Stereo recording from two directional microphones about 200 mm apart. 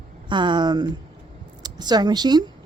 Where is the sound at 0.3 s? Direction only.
25° right (ahead or behind).